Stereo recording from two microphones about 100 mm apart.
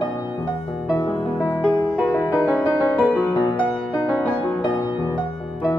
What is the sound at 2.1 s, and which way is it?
Music, 30° left (ahead or behind).